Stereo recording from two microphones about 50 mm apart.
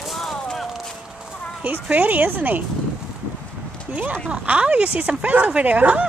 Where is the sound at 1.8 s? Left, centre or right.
Right.